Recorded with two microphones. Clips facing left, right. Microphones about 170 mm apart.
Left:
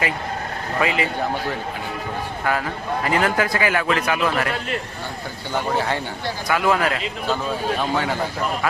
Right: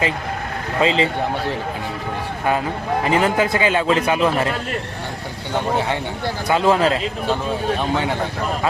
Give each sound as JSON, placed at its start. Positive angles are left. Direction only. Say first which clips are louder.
{"t": 0.8, "sound": "a man's voice", "louder": "right 4 dB", "side_deg": -25}
{"t": 2.4, "sound": "a man's voice", "louder": "right 4 dB", "side_deg": -20}
{"t": 6.5, "sound": "a man's voice", "louder": "right 4 dB", "side_deg": -25}